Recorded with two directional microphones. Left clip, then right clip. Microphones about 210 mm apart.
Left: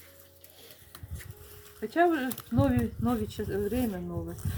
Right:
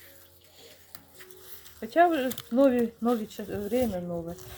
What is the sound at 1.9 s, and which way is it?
Speech, 40° right (ahead or behind).